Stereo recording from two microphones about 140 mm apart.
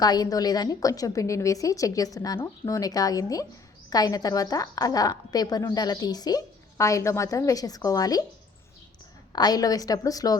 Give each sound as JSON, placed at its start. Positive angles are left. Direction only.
{"t": 0.0, "sound": "a woman's voice", "side_deg": 30}
{"t": 9.3, "sound": "a woman's voice", "side_deg": 30}